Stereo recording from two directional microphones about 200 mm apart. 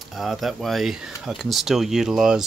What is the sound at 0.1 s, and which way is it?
Speech, centre (ahead or behind).